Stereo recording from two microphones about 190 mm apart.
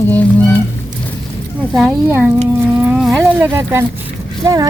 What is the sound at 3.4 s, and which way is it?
Speech, 10° right (ahead or behind).